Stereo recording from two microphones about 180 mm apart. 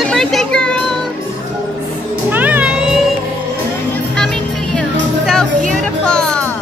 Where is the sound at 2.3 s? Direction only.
10° right (ahead or behind).